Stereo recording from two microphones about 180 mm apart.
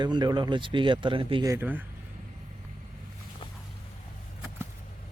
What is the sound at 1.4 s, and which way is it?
Speech, 15° right (ahead or behind).